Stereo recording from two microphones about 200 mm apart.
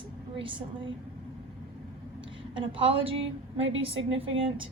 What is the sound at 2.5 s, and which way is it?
Speech, 25° right (ahead or behind).